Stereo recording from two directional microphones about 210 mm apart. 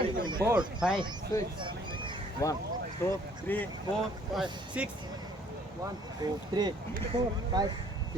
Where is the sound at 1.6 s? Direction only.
25° right (ahead or behind).